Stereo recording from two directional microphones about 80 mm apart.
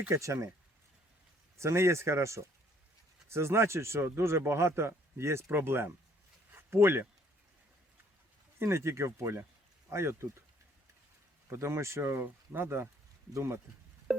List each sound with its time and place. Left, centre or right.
0.1 s speech: right
1.5 s speech: right
6.5 s a sound: right
8.5 s speech: right
11.4 s speech: right
14.1 s a sound: centre